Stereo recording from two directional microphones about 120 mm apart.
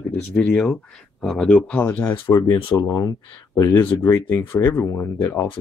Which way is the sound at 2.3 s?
30° left (ahead or behind).